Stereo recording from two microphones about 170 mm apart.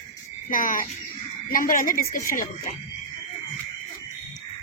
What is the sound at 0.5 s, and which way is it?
Speech, 55° left (ahead or behind).